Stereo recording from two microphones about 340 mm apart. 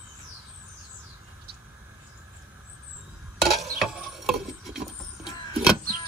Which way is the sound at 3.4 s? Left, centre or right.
Centre.